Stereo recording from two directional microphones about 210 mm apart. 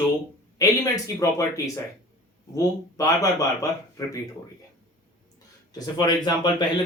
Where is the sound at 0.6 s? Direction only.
15° left (ahead or behind).